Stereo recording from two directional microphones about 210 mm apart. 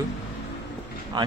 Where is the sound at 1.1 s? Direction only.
20° right (ahead or behind).